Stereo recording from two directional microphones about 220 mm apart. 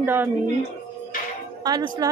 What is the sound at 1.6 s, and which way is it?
Speech, 20° right (ahead or behind).